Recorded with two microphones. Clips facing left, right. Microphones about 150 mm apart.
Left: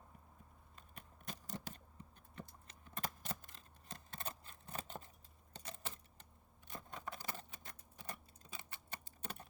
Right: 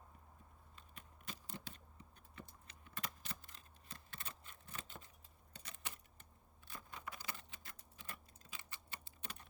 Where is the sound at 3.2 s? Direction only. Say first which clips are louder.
Left 6 dB; 50° left (ahead or behind).